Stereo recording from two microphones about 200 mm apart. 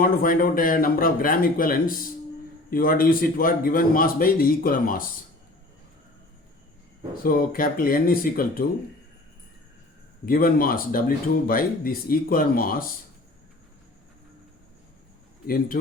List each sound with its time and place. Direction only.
0.0 s a man's voice: 45° left (ahead or behind)
7.2 s a man's voice: 45° left (ahead or behind)
10.2 s a man's voice: 45° left (ahead or behind)
15.4 s a man's voice: 45° left (ahead or behind)